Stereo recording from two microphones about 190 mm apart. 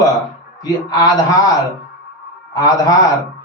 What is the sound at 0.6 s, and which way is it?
Speech, 20° left (ahead or behind).